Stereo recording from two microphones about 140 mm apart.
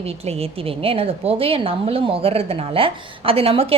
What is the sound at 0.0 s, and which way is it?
A woman's voice, 45° right (ahead or behind).